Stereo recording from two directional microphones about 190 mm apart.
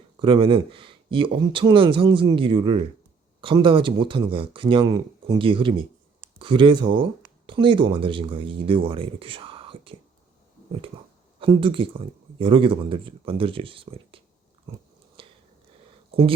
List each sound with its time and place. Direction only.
0.2 s speech: 25° right (ahead or behind)
11.3 s speech: 25° right (ahead or behind)
15.2 s whispering: 30° right (ahead or behind)